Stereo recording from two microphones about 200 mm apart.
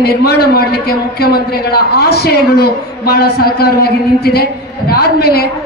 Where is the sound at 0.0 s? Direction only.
50° left (ahead or behind).